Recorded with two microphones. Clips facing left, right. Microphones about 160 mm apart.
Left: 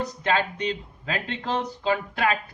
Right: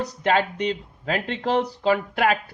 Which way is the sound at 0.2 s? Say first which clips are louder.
Right 4 dB; 70° right (ahead or behind).